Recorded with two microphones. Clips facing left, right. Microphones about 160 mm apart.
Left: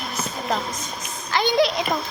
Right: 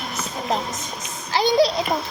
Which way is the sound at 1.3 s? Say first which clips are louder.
Right 2 dB; 35° right (ahead or behind).